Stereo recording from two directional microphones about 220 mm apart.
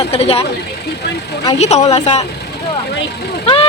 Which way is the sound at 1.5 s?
30° left (ahead or behind).